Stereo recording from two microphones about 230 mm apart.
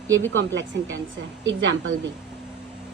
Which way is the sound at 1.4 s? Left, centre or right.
Right.